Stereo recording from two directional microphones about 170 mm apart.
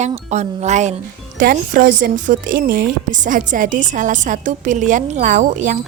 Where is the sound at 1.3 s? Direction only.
55° right (ahead or behind).